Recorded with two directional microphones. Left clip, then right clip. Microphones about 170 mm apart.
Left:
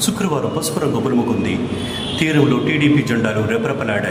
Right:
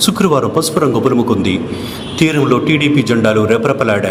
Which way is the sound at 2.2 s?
35° right (ahead or behind).